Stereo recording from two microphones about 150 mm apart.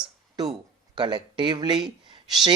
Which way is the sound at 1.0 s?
30° right (ahead or behind).